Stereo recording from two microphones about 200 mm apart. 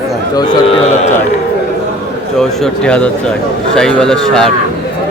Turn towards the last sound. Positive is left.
turn(degrees=5)  # may be behind; listen again after turning